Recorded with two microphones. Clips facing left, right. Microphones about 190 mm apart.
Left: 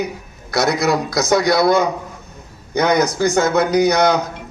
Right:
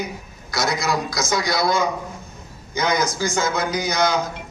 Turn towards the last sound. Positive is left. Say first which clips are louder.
# left 7 dB
turn(degrees=60)  # may be behind; listen again after turning